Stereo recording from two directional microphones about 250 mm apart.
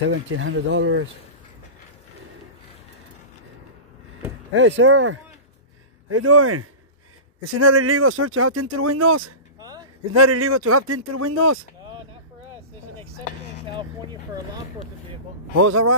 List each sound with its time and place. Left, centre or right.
0.1 s speech: right
4.6 s speech: right
9.6 s a sound: centre
10.1 s speech: right
15.5 s speech: right